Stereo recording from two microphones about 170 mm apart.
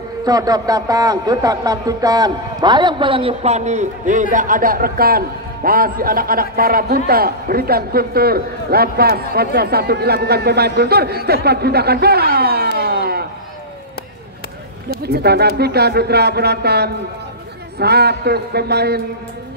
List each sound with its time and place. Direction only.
0.2 s a man's voice: 20° right (ahead or behind); by 12.6 s 65° right (ahead or behind)
12.7 s a sound: 70° right (ahead or behind)
15.0 s speech: 70° right (ahead or behind)